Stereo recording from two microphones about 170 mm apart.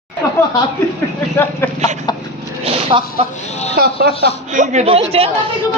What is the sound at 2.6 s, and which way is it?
Speech, 35° right (ahead or behind).